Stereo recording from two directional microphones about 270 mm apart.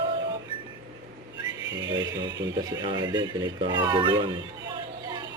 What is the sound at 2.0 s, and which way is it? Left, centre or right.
Speech, centre.